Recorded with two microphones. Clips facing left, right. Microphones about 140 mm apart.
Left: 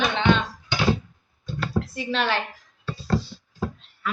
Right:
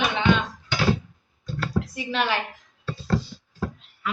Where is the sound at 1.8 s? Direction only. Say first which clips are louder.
Left 1 dB; 15° right (ahead or behind).